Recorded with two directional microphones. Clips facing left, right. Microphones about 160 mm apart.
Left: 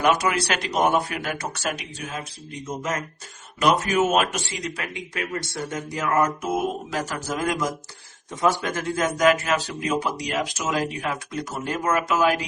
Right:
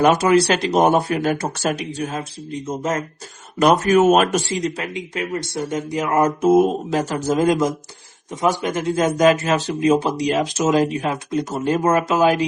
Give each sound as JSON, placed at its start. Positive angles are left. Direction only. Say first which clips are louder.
{"t": 0.0, "sound": "speech", "louder": "right 7 dB", "side_deg": -35}
{"t": 3.6, "sound": "speech", "louder": "right 6 dB", "side_deg": -40}
{"t": 4.6, "sound": "a man's voice", "louder": "right 7 dB", "side_deg": -25}
{"t": 8.3, "sound": "a man's voice", "louder": "right 3 dB", "side_deg": -15}